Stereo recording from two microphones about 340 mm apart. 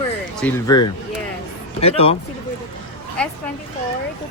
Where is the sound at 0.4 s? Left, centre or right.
Centre.